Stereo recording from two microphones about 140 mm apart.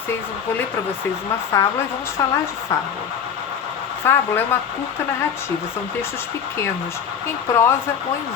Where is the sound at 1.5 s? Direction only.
20° left (ahead or behind).